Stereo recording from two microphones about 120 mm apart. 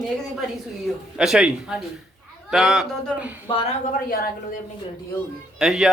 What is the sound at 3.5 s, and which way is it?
Speech, 40° left (ahead or behind).